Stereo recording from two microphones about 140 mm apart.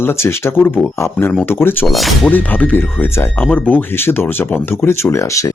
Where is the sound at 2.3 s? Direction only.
10° left (ahead or behind).